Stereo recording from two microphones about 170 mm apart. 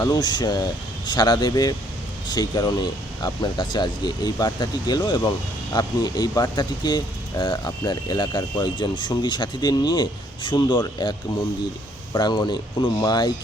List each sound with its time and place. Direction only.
0.0 s speech: 25° left (ahead or behind)
12.1 s speech: 25° left (ahead or behind)